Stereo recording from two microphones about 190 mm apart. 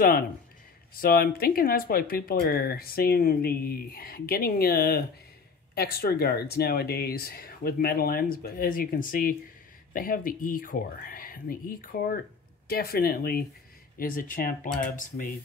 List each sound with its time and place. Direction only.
0.9 s speech: 50° left (ahead or behind)